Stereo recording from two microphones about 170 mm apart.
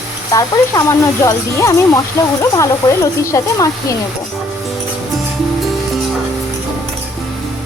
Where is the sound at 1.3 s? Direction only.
20° left (ahead or behind).